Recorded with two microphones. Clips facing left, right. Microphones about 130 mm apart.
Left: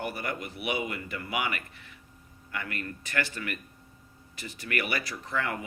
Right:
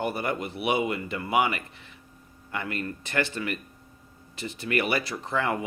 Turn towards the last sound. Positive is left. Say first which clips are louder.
# right 5 dB
turn(degrees=-25)  # may be behind; listen again after turning